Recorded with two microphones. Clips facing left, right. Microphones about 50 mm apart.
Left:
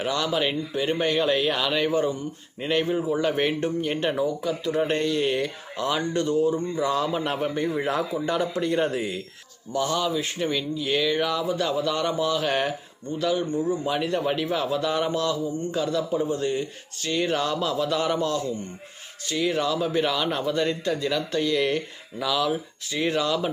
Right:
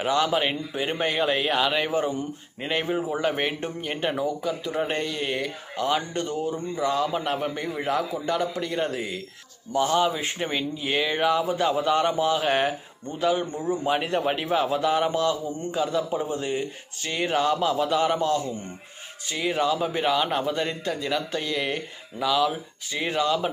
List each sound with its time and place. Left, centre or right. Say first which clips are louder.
0.0 s a man's voice: right 2 dB; centre
9.7 s a man's voice: right 3 dB; right; by 23.5 s centre